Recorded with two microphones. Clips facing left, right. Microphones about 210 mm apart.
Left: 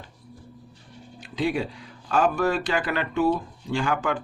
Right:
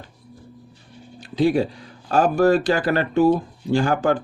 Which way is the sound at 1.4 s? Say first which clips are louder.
Right 7 dB; 35° right (ahead or behind).